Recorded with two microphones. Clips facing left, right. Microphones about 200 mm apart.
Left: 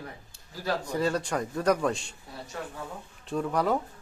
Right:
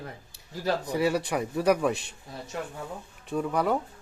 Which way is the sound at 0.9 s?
10° right (ahead or behind).